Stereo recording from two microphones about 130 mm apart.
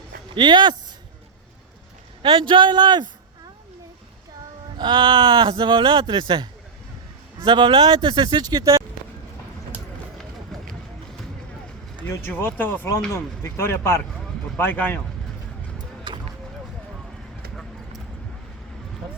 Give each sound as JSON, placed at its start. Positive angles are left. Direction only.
{"t": 0.3, "sound": "speech", "side_deg": -35}
{"t": 2.2, "sound": "speech", "side_deg": -40}
{"t": 4.8, "sound": "speech", "side_deg": -40}
{"t": 10.5, "sound": "run", "side_deg": 5}
{"t": 12.0, "sound": "speech", "side_deg": 15}
{"t": 16.1, "sound": "a sound", "side_deg": -35}